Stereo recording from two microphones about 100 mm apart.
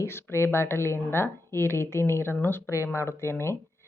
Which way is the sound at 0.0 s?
25° left (ahead or behind).